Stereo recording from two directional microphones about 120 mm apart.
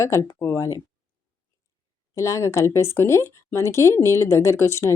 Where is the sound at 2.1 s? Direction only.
25° left (ahead or behind).